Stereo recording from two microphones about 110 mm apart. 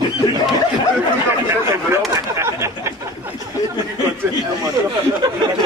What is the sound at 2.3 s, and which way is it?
Speech, 25° right (ahead or behind).